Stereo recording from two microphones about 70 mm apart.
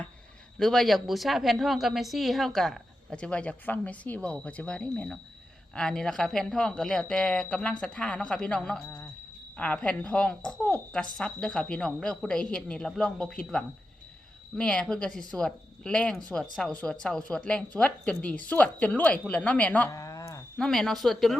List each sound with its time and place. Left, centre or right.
0.6 s a woman's voice: centre
3.2 s speech: centre
19.9 s a sound: left
20.6 s a woman's voice: centre